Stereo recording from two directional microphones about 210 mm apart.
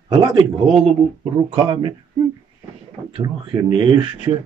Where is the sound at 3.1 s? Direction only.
25° right (ahead or behind).